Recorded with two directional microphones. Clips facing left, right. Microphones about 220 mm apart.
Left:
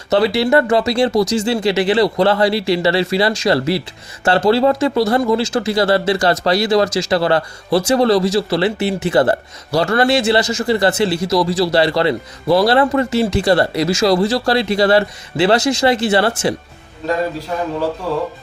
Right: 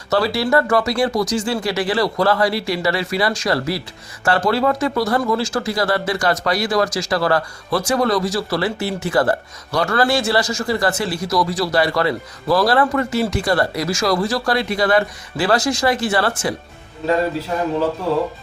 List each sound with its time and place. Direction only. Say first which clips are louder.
0.1 s speech: left 4 dB; 20° left (ahead or behind)